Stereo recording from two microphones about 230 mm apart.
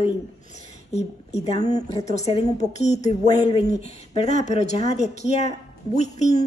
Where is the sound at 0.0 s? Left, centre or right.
Left.